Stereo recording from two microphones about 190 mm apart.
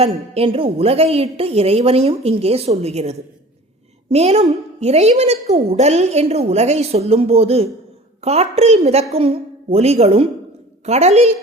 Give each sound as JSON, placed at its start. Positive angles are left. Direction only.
{"t": 0.0, "sound": "a woman's voice", "side_deg": -30}